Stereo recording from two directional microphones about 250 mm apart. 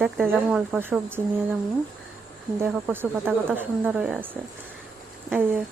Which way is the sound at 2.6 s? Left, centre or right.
Centre.